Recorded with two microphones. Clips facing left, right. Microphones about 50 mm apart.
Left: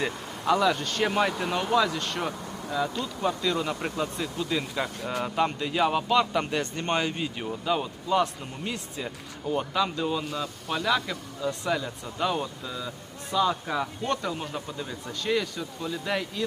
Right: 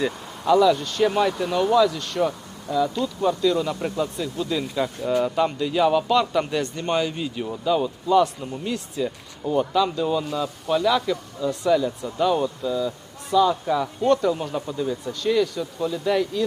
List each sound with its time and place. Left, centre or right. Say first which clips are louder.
0.0 s speech: right 4 dB; left
1.0 s speech: right 5 dB; left
1.9 s speech: right 6 dB; left
3.0 s speech: right 6 dB; centre
3.4 s speech: right 6 dB; left
6.6 s speech: right 4 dB; left
7.1 s speech: right 3 dB; centre
10.1 s speech: right 6 dB; centre
11.7 s speech: right 8 dB; left